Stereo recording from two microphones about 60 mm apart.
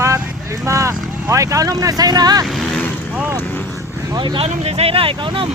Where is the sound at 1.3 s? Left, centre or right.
Right.